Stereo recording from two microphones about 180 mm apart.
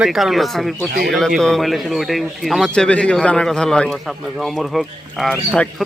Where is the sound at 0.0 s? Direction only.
Centre (ahead or behind).